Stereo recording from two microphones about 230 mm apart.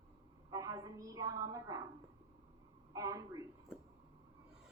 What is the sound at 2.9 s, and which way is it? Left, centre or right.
Speech, centre.